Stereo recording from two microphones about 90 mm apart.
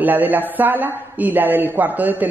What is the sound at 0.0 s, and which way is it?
A woman's voice, 20° right (ahead or behind).